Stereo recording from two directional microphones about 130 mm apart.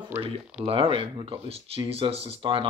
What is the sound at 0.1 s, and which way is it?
Speech, 15° right (ahead or behind).